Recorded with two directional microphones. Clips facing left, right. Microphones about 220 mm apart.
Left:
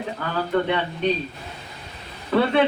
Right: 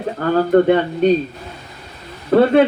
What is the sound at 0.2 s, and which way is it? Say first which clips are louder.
Speech: right 11 dB; 45° right (ahead or behind).